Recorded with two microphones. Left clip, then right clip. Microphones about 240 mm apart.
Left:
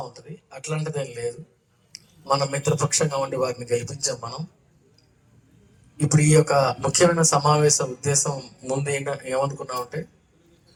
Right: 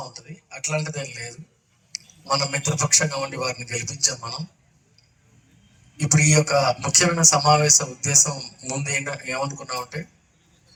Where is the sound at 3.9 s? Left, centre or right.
Left.